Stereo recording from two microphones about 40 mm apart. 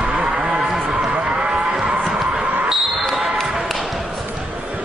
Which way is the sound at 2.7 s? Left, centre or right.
Centre.